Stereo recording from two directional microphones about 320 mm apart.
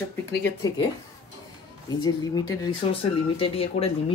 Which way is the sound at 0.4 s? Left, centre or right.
Centre.